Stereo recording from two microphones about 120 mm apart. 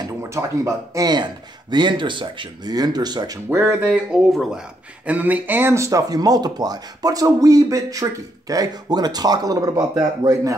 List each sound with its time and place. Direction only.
0.0 s speech: 25° right (ahead or behind)
3.4 s speech: 20° right (ahead or behind)